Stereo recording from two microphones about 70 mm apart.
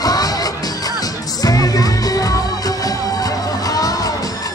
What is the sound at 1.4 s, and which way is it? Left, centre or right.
Music, left.